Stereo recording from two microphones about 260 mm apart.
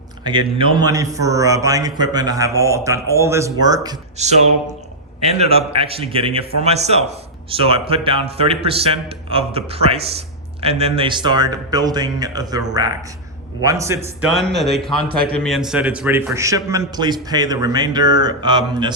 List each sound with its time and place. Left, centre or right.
0.3 s a man's voice: centre
4.2 s a man's voice: right
14.5 s a man's voice: centre